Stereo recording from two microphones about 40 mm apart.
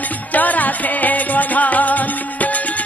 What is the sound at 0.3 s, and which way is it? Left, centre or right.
Music, left.